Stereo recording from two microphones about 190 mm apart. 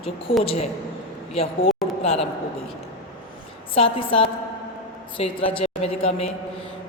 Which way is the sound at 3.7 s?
30° left (ahead or behind).